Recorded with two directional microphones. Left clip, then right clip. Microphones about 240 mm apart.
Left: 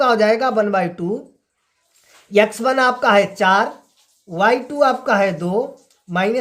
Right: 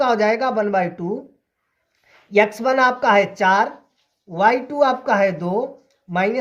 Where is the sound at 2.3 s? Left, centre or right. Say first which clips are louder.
Left 1 dB; centre.